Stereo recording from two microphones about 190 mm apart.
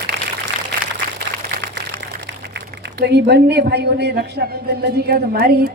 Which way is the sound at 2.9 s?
65° right (ahead or behind).